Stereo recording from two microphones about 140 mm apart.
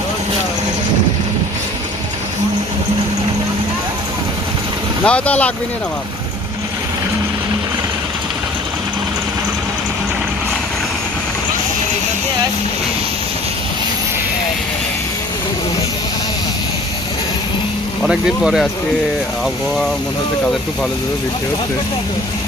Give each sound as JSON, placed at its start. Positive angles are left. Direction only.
{"t": 5.0, "sound": "speech", "side_deg": 10}
{"t": 18.0, "sound": "speech", "side_deg": -5}